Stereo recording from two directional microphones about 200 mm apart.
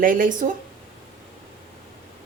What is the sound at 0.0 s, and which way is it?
Speech, 45° right (ahead or behind).